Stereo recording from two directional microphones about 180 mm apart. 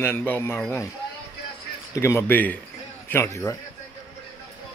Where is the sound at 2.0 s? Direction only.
15° left (ahead or behind).